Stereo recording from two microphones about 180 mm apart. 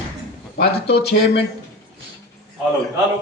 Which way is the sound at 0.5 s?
70° left (ahead or behind).